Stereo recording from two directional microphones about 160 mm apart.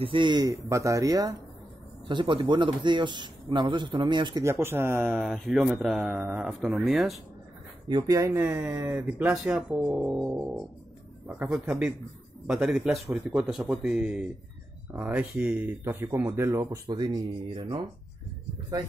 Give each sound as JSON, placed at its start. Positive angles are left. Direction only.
{"t": 0.0, "sound": "a man's voice", "side_deg": -30}
{"t": 4.5, "sound": "speech", "side_deg": -15}
{"t": 5.2, "sound": "speech", "side_deg": 0}
{"t": 7.9, "sound": "speech", "side_deg": -20}